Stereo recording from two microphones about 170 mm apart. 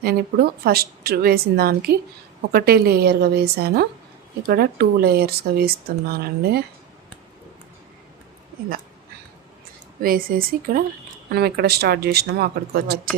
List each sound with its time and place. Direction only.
0.0 s speech: 65° right (ahead or behind)
10.0 s speech: 55° right (ahead or behind)